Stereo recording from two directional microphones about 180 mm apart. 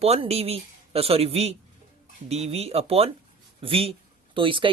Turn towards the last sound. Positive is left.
turn(degrees=-30)  # may be behind; listen again after turning